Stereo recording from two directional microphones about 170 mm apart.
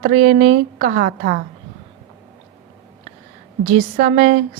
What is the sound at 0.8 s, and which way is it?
Speech, 60° right (ahead or behind).